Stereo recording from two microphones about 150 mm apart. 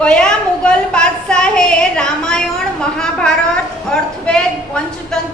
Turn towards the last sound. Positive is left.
turn(degrees=5)  # may be behind; listen again after turning